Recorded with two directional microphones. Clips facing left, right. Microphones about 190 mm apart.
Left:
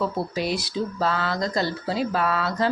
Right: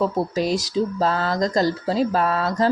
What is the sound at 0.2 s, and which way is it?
Speech, 45° right (ahead or behind).